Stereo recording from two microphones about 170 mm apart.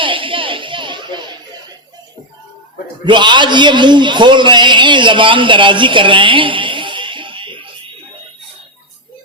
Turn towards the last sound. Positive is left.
turn(degrees=-30)  # may be behind; listen again after turning